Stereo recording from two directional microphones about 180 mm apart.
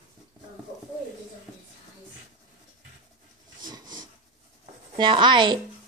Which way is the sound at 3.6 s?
20° right (ahead or behind).